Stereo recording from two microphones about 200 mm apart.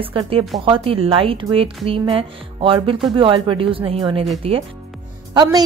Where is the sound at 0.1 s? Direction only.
25° right (ahead or behind).